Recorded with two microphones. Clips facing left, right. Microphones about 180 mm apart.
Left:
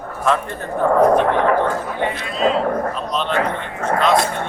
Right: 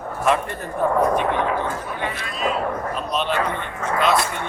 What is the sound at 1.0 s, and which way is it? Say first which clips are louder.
Speech: left 8 dB; 65° left (ahead or behind).